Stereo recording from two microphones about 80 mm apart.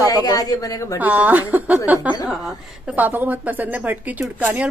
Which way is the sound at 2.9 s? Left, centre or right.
Right.